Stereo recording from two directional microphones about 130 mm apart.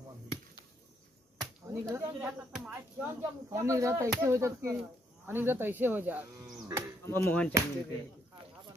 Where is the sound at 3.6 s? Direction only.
25° right (ahead or behind).